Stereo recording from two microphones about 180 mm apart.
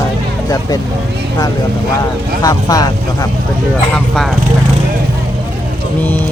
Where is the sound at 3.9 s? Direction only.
Centre (ahead or behind).